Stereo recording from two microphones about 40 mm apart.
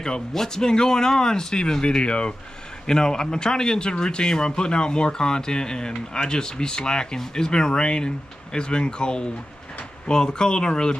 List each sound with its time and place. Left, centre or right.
0.0 s speech: centre